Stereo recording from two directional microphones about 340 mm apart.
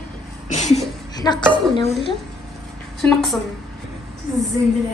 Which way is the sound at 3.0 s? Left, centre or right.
Centre.